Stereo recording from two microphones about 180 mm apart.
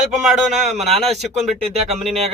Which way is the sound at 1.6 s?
35° right (ahead or behind).